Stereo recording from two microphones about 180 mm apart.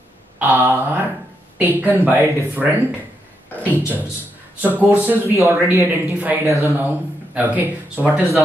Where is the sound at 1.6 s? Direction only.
10° right (ahead or behind).